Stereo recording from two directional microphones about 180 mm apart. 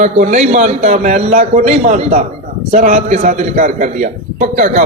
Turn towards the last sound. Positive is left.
turn(degrees=-45)  # may be behind; listen again after turning